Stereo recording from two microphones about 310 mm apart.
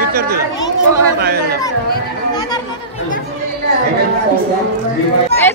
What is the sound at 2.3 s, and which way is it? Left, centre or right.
Speech, centre.